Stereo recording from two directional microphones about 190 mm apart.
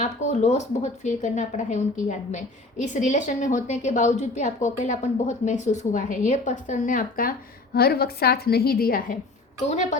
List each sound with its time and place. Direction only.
0.0 s a woman's voice: 35° left (ahead or behind)
9.6 s a woman's voice: 40° left (ahead or behind)